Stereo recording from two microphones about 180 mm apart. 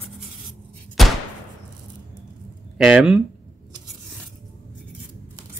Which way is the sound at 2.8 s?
5° right (ahead or behind).